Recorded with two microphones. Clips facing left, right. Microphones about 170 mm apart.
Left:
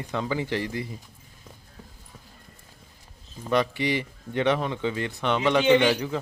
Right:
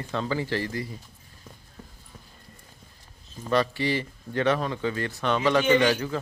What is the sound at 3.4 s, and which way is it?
Speech, 15° left (ahead or behind).